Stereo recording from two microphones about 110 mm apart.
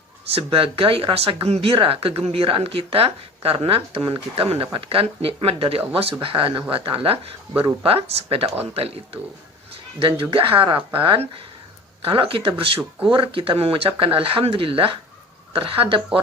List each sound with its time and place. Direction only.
0.3 s speech: 55° right (ahead or behind)
10.0 s speech: 45° right (ahead or behind)
12.0 s speech: 55° right (ahead or behind)